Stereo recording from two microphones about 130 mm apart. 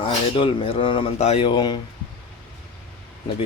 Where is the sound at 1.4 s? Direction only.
35° left (ahead or behind).